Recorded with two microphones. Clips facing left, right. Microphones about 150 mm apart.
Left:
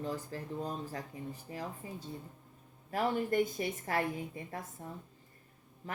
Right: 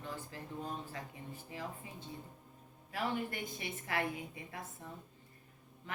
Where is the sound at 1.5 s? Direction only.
40° left (ahead or behind).